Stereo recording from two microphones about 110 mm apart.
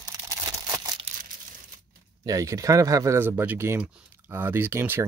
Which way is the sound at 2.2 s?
30° right (ahead or behind).